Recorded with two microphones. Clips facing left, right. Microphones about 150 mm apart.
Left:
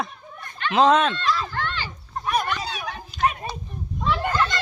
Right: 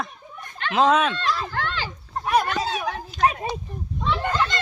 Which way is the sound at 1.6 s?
90° right.